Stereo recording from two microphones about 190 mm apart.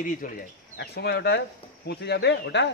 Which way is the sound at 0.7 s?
60° left (ahead or behind).